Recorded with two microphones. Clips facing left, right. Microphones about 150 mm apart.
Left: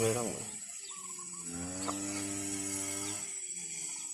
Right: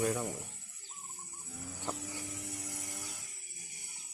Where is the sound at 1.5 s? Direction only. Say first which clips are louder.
Left 3 dB; 85° left; by 3.2 s 60° left (ahead or behind).